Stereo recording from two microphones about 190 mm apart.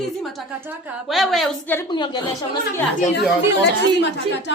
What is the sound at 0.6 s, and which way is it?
A woman's voice, 10° right (ahead or behind).